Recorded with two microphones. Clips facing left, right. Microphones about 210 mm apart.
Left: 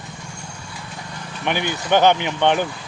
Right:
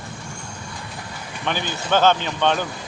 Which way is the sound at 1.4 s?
15° left (ahead or behind).